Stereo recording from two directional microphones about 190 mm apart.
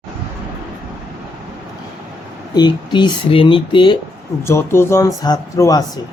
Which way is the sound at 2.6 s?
25° left (ahead or behind).